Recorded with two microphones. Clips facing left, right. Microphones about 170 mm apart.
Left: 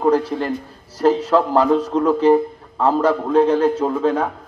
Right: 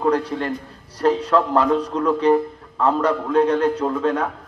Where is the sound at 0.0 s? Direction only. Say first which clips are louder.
Left 3 dB; 25° left (ahead or behind).